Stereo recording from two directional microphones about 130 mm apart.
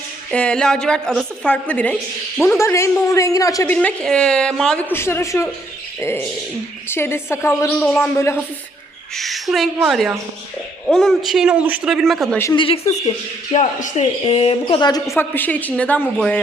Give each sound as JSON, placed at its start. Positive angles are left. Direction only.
{"t": 0.3, "sound": "a man's voice", "side_deg": 10}
{"t": 2.4, "sound": "a woman's voice", "side_deg": 20}
{"t": 3.7, "sound": "a woman's voice", "side_deg": 10}
{"t": 4.9, "sound": "a woman's voice", "side_deg": 20}
{"t": 9.1, "sound": "a man's voice", "side_deg": 0}
{"t": 12.5, "sound": "speech", "side_deg": 45}
{"t": 13.5, "sound": "speech", "side_deg": 70}
{"t": 14.8, "sound": "a woman's voice", "side_deg": 30}